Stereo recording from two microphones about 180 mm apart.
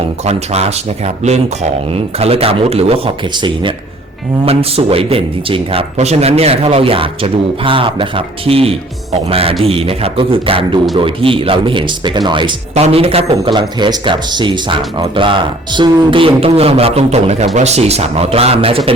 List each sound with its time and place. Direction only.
0.3 s speech: 35° right (ahead or behind)